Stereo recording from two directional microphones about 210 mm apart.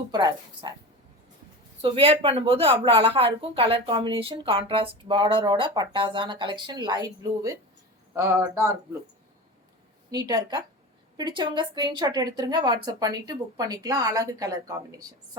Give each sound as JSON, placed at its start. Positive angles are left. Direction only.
{"t": 0.1, "sound": "speech", "side_deg": -20}
{"t": 1.8, "sound": "speech", "side_deg": -25}
{"t": 10.1, "sound": "speech", "side_deg": -20}